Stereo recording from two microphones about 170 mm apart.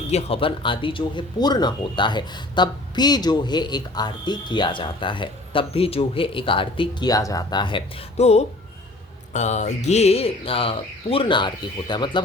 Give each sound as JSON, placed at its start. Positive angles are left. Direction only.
{"t": 0.1, "sound": "speech", "side_deg": 35}